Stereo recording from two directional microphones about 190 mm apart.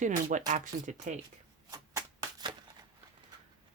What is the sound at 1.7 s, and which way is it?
Shuffling cards, 20° right (ahead or behind).